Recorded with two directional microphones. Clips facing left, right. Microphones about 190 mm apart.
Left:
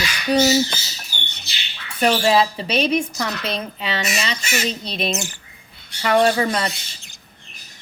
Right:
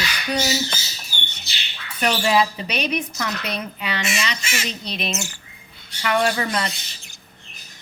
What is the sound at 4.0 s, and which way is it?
Speech, 35° left (ahead or behind).